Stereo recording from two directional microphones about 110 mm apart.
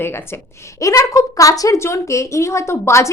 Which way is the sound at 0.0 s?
20° left (ahead or behind).